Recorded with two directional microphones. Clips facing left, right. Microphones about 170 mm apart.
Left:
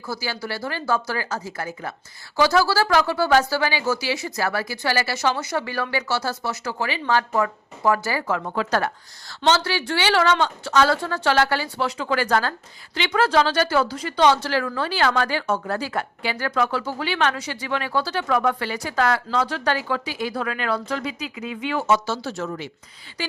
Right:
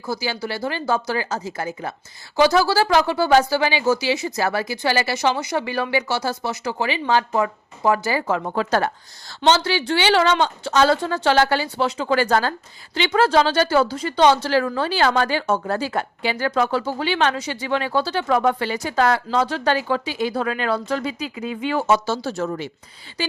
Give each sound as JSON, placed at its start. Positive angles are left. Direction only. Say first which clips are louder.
{"t": 0.0, "sound": "a woman's voice", "louder": "right 4 dB", "side_deg": -20}